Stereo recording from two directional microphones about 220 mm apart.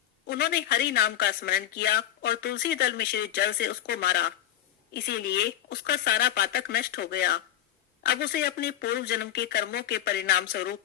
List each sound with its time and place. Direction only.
0.3 s speech: 45° left (ahead or behind)